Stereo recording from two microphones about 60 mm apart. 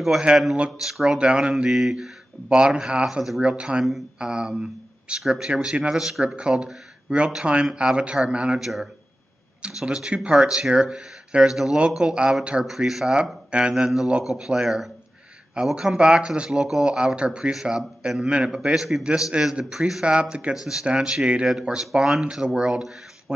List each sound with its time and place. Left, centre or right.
0.6 s speech: centre
8.5 s speech: centre
10.4 s speech: centre
19.3 s speech: centre